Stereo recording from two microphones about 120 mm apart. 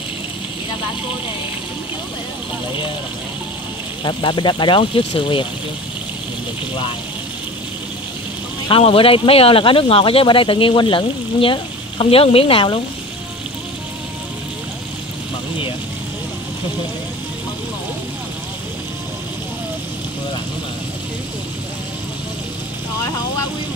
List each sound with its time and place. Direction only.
4.0 s speech: 40° left (ahead or behind)
8.6 s speech: 50° left (ahead or behind)